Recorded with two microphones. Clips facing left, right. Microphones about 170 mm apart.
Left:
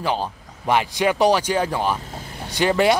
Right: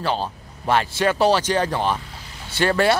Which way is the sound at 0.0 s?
15° left (ahead or behind).